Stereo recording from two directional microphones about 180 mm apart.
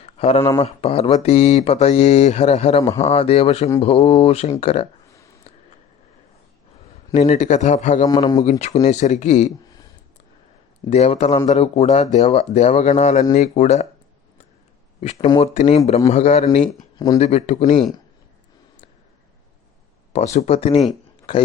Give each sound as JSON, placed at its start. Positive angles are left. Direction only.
{"t": 0.0, "sound": "a sound", "side_deg": 35}
{"t": 0.6, "sound": "speech", "side_deg": 35}
{"t": 5.1, "sound": "a sound", "side_deg": 15}
{"t": 7.1, "sound": "speech", "side_deg": 40}
{"t": 8.0, "sound": "speech", "side_deg": 20}
{"t": 8.4, "sound": "speech", "side_deg": 40}
{"t": 10.8, "sound": "speech", "side_deg": 40}
{"t": 15.0, "sound": "speech", "side_deg": 40}
{"t": 20.1, "sound": "speech", "side_deg": 40}